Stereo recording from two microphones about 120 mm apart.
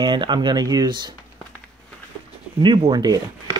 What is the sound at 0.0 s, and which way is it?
Speech, 40° right (ahead or behind).